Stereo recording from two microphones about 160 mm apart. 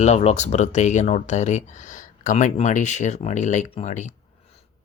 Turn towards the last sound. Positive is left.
turn(degrees=50)  # may be behind; listen again after turning